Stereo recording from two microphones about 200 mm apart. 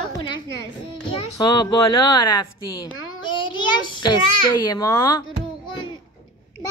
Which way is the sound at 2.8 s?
85° left.